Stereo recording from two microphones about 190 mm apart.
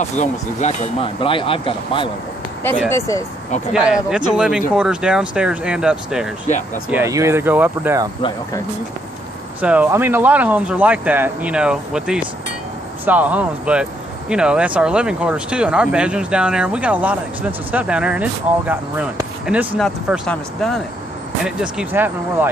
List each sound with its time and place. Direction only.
0.1 s speech: 40° left (ahead or behind)
2.9 s speech: 15° left (ahead or behind)
3.7 s speech: 5° right (ahead or behind)
6.9 s speech: 15° right (ahead or behind)
9.6 s speech: 5° right (ahead or behind)